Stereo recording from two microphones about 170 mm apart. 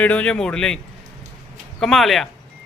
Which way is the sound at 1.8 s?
Centre (ahead or behind).